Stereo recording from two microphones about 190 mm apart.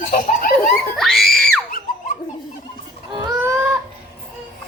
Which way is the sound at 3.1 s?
15° right (ahead or behind).